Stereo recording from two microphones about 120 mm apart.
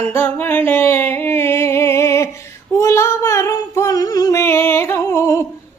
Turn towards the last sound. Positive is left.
turn(degrees=25)  # may be behind; listen again after turning